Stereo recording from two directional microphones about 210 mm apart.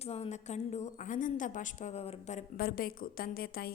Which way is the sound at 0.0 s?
30° left (ahead or behind).